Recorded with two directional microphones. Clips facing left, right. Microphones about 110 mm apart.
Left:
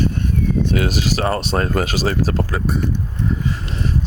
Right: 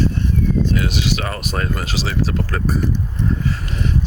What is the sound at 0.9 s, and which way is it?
Speech, 40° left (ahead or behind).